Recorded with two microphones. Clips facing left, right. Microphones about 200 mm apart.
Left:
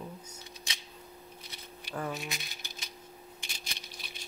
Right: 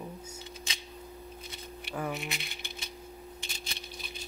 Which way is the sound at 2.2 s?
60° right (ahead or behind).